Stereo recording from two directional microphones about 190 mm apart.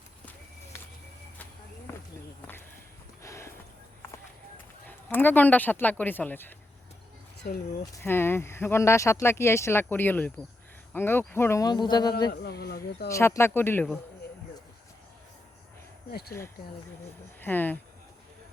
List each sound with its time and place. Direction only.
3.2 s a sound: 15° left (ahead or behind)
4.9 s speech: 10° left (ahead or behind)
8.0 s speech: 10° left (ahead or behind)
12.3 s speech: 60° left (ahead or behind)
13.1 s speech: 15° left (ahead or behind)
17.4 s speech: 10° left (ahead or behind)